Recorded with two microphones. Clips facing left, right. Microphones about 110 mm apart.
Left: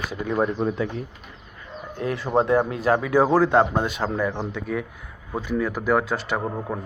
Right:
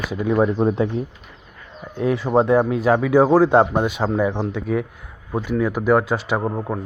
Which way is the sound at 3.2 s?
15° right (ahead or behind).